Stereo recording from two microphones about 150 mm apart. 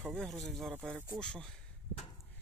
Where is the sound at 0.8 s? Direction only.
15° right (ahead or behind).